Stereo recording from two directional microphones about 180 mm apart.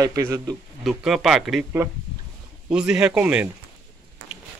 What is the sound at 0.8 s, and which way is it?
Speech, centre (ahead or behind).